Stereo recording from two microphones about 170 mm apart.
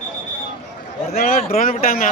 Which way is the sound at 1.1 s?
60° left (ahead or behind).